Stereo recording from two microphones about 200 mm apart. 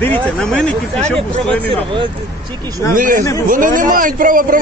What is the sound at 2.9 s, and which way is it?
Speech, 45° right (ahead or behind).